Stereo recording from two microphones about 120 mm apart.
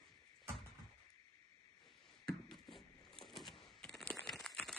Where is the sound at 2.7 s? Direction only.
Centre (ahead or behind).